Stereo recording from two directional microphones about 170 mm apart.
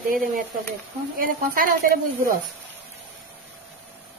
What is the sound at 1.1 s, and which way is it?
Speech, 55° right (ahead or behind).